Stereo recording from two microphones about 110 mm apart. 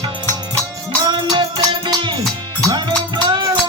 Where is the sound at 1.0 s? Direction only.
45° right (ahead or behind).